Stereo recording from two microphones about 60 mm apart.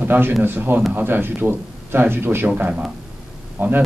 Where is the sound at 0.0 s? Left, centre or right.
Right.